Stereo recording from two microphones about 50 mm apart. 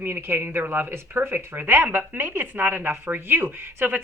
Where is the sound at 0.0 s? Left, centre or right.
Right.